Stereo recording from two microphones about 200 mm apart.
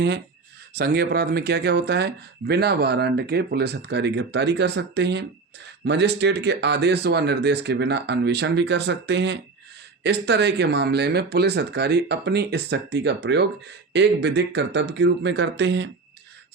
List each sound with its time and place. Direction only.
0.7 s speech: 50° right (ahead or behind)